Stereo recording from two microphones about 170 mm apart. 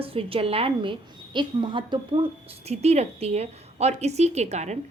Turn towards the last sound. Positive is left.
turn(degrees=-40)  # may be behind; listen again after turning